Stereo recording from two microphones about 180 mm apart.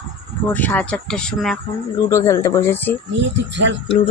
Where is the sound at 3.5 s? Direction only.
80° right.